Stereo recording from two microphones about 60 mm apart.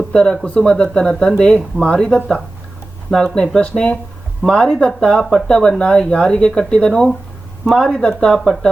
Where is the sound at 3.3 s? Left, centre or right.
Centre.